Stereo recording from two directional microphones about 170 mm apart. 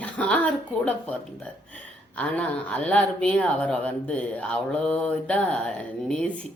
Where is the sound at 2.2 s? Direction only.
5° left (ahead or behind).